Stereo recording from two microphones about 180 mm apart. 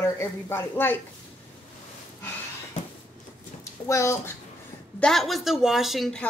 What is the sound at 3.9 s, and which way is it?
Speech, 15° left (ahead or behind).